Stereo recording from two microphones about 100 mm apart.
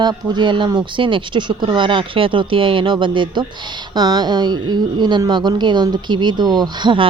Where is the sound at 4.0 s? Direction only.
45° right (ahead or behind).